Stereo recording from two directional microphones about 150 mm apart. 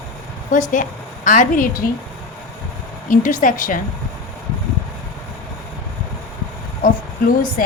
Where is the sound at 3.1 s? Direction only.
60° left (ahead or behind).